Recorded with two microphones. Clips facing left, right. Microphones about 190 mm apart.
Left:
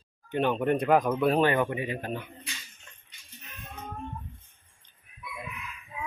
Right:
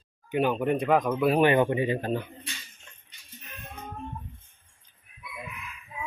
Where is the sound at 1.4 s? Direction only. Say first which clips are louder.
Right 3 dB; 20° right (ahead or behind).